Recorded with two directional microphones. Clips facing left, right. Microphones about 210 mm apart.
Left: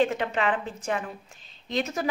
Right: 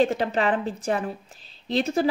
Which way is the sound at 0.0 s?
35° right (ahead or behind).